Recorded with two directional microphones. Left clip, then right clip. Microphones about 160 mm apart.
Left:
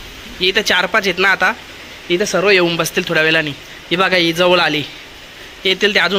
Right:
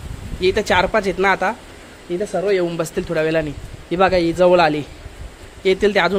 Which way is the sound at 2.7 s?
5° right (ahead or behind).